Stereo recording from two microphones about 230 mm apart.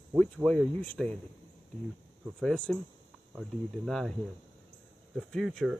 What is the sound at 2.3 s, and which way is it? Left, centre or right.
Speech, centre.